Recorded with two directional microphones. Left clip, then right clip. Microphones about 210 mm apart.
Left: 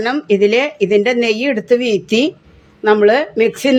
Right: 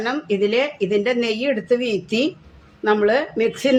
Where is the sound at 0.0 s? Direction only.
30° left (ahead or behind).